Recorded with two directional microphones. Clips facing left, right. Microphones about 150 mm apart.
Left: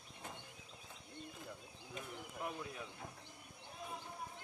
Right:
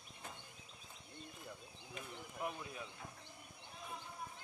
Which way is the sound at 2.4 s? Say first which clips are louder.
Right 2 dB; 10° right (ahead or behind).